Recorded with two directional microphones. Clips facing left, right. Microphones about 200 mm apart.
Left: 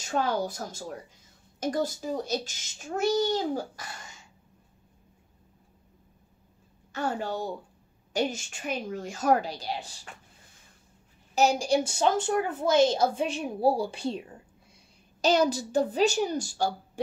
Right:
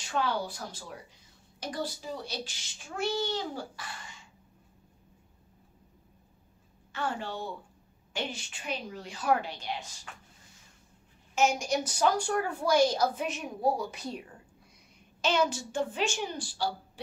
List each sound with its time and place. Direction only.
0.0 s a child's voice: 45° left (ahead or behind)
6.9 s a woman's voice: 40° left (ahead or behind)
11.3 s a woman's voice: 35° left (ahead or behind)
15.2 s a woman's voice: 40° left (ahead or behind)